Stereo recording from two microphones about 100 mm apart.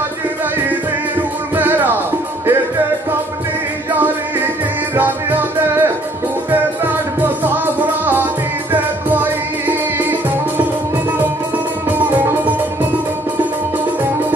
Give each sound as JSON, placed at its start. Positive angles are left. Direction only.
{"t": 1.5, "sound": "music", "side_deg": -20}
{"t": 4.9, "sound": "music", "side_deg": -20}
{"t": 7.4, "sound": "music", "side_deg": -20}
{"t": 9.7, "sound": "music", "side_deg": -20}